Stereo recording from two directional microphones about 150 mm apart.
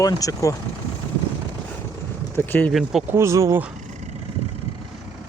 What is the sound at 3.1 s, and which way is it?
Speech, 20° right (ahead or behind).